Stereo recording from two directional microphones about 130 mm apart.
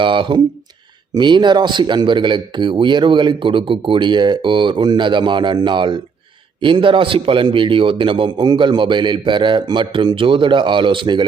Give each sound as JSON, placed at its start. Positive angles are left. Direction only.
{"t": 0.0, "sound": "speech", "side_deg": -40}